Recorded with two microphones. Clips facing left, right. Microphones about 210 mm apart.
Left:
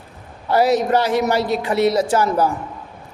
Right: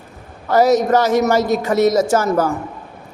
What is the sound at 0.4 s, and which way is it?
A man's voice, 45° right (ahead or behind).